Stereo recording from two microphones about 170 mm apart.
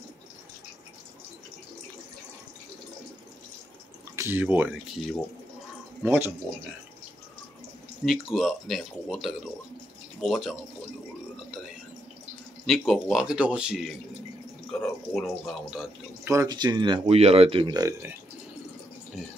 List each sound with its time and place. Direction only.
4.2 s speech: 10° right (ahead or behind)
6.0 s speech: 15° right (ahead or behind)
8.0 s speech: centre (ahead or behind)
12.6 s speech: centre (ahead or behind)
16.3 s speech: 20° right (ahead or behind)